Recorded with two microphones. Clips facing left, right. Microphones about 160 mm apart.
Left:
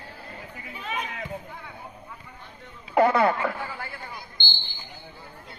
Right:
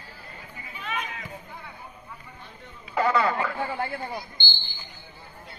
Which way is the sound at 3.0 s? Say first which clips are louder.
Left 4 dB; 55° left (ahead or behind).